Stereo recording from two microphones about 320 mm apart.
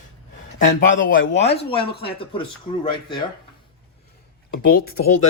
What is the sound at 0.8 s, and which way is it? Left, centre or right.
A man's voice, left.